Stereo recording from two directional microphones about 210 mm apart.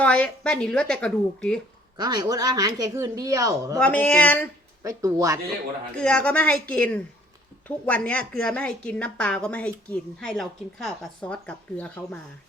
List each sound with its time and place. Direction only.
0.0 s a woman's voice: 5° left (ahead or behind)
2.0 s speech: 20° right (ahead or behind)
3.8 s speech: 5° left (ahead or behind)
4.8 s speech: 15° right (ahead or behind)
6.0 s a woman's voice: 5° left (ahead or behind)